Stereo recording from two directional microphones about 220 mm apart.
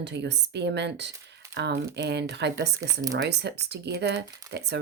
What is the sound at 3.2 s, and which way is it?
Speech, 50° right (ahead or behind).